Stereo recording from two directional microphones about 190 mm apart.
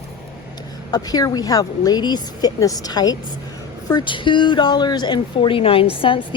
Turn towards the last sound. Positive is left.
turn(degrees=30)  # may be behind; listen again after turning